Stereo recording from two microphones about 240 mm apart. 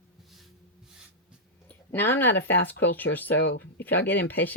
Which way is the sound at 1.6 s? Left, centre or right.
Centre.